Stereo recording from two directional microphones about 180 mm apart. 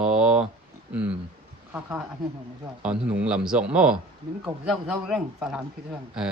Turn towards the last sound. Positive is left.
turn(degrees=-5)  # may be behind; listen again after turning